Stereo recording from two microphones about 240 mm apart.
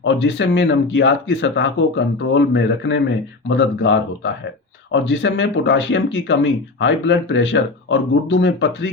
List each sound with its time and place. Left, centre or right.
0.0 s speech: left